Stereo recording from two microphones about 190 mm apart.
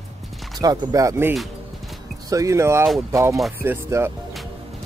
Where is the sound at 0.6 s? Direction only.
20° right (ahead or behind).